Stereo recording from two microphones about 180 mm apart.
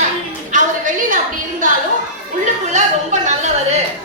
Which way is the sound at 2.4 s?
40° right (ahead or behind).